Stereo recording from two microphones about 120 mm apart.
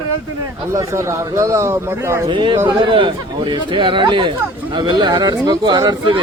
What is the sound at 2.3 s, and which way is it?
A man's voice, 45° right (ahead or behind).